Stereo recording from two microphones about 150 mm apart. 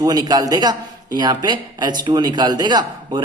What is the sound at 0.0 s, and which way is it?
Speech, 25° right (ahead or behind).